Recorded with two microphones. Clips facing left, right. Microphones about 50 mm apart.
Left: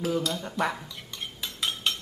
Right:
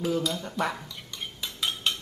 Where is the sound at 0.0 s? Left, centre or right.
Centre.